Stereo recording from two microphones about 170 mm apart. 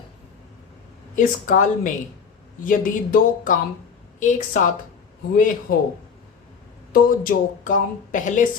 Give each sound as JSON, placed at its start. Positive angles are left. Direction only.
{"t": 1.1, "sound": "speech", "side_deg": 50}
{"t": 6.9, "sound": "speech", "side_deg": 55}